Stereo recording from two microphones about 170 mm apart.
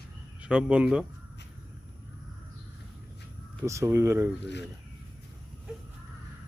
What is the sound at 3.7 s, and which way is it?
Speech, 15° right (ahead or behind).